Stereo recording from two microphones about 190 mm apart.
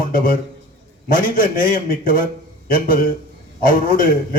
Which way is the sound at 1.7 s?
50° left (ahead or behind).